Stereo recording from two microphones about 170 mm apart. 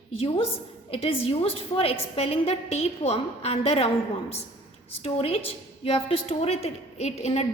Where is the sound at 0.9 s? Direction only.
35° left (ahead or behind).